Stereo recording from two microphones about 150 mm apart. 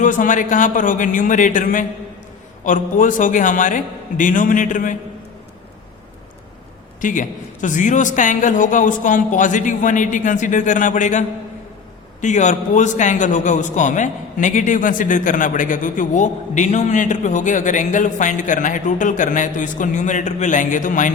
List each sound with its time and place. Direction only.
0.0 s a man's voice: 60° left (ahead or behind)
7.0 s a man's voice: 60° left (ahead or behind)